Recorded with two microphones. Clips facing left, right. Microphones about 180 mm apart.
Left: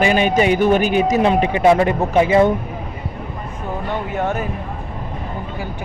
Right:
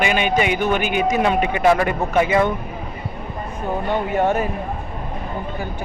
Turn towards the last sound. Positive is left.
turn(degrees=0)  # may be behind; listen again after turning